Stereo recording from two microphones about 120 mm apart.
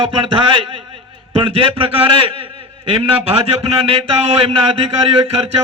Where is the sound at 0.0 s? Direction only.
50° right (ahead or behind).